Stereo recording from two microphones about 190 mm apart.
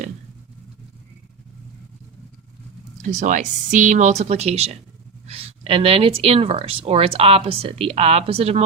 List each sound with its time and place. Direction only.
3.0 s speech: 40° right (ahead or behind)